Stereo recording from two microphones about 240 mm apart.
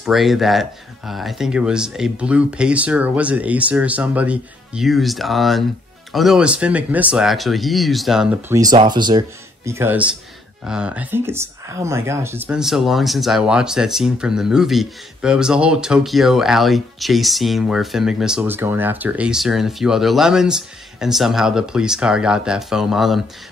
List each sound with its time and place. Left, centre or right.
0.0 s speech: centre